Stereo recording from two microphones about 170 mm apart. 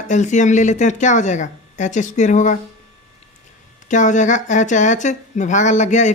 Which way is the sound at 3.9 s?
45° left (ahead or behind).